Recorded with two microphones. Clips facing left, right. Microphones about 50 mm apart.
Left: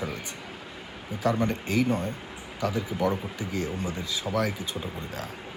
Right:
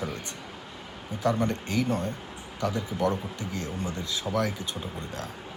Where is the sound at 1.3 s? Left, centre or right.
Left.